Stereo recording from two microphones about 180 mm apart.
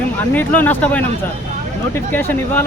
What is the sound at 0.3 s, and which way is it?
Speech, 10° left (ahead or behind).